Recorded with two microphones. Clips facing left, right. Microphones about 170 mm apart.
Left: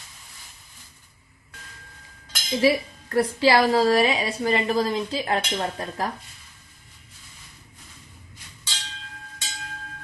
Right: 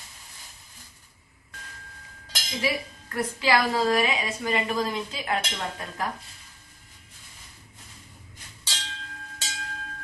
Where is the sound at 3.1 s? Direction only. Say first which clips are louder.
Left 5 dB; 35° left (ahead or behind).